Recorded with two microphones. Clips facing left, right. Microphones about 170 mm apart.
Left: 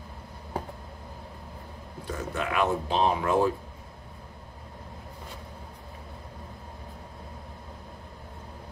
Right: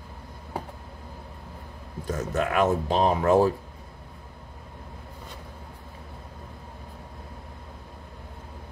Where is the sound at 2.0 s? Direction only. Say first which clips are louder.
Right 5 dB; 45° right (ahead or behind).